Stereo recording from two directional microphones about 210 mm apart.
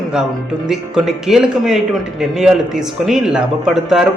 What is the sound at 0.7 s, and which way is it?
A man's voice, centre (ahead or behind).